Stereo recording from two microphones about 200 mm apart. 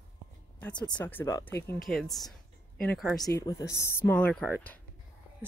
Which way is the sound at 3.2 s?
15° left (ahead or behind).